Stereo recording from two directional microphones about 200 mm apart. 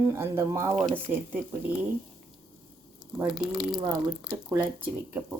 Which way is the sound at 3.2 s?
5° right (ahead or behind).